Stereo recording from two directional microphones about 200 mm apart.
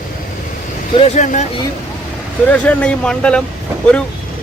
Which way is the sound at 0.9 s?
35° left (ahead or behind).